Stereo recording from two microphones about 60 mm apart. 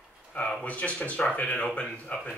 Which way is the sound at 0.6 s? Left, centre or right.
Left.